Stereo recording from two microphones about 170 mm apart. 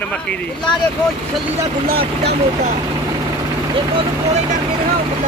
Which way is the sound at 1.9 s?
60° right (ahead or behind).